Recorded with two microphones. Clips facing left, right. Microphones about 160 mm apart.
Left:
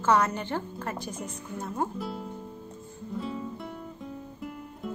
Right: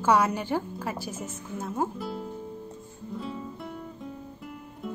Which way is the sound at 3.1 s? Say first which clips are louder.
Left 2 dB; centre (ahead or behind).